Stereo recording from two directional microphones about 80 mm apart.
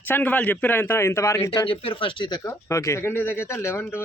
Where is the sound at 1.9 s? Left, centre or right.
Left.